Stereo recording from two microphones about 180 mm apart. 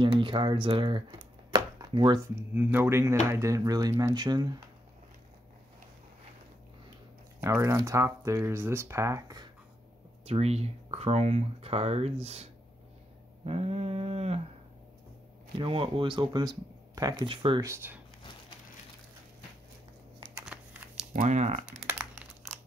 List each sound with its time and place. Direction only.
0.0 s speech: 30° right (ahead or behind)
1.5 s chopping: 25° right (ahead or behind)
2.5 s speech: 10° right (ahead or behind)
7.4 s speech: 15° right (ahead or behind)
10.2 s speech: 35° right (ahead or behind)
13.5 s a sound: 35° right (ahead or behind)
15.6 s speech: 30° right (ahead or behind)
17.6 s speech: 10° right (ahead or behind)
20.2 s a sound: 25° right (ahead or behind)
21.1 s speech: 45° right (ahead or behind)
21.6 s crumpling: 5° right (ahead or behind)